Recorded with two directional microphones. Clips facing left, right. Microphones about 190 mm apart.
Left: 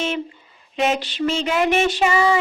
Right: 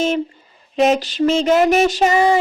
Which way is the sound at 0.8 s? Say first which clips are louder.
Right 6 dB; 40° right (ahead or behind).